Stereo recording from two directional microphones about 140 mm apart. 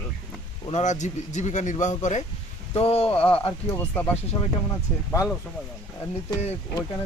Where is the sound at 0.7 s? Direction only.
60° left (ahead or behind).